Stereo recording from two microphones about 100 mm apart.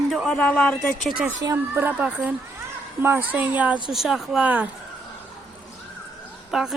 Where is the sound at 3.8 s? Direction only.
5° right (ahead or behind).